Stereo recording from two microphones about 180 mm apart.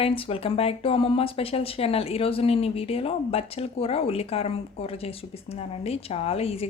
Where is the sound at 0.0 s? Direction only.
30° left (ahead or behind).